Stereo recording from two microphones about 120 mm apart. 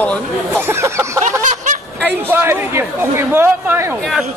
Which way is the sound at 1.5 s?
90° right.